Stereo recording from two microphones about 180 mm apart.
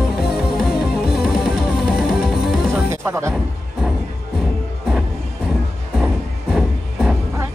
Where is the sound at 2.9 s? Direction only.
15° right (ahead or behind).